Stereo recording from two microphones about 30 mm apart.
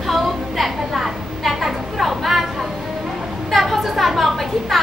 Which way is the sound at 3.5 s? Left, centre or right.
Centre.